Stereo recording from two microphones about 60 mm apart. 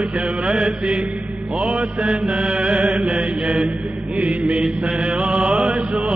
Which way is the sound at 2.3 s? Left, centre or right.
Centre.